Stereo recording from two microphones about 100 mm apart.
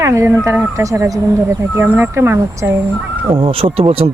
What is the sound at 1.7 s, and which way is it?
Speech, 20° right (ahead or behind).